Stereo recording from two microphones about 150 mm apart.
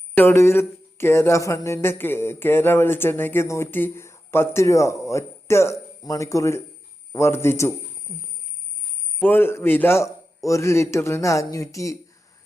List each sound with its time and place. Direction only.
0.2 s a man's voice: 15° left (ahead or behind)
9.2 s a man's voice: 15° left (ahead or behind)